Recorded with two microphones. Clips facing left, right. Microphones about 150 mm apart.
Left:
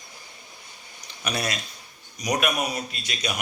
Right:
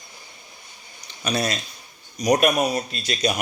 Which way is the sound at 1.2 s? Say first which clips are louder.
Right 4 dB; 30° right (ahead or behind).